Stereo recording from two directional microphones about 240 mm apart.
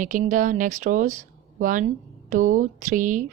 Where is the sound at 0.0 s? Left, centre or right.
Right.